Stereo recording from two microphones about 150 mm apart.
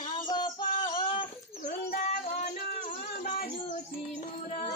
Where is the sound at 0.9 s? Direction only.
35° left (ahead or behind).